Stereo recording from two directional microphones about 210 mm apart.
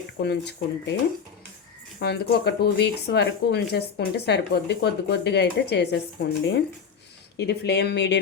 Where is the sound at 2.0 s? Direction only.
50° left (ahead or behind).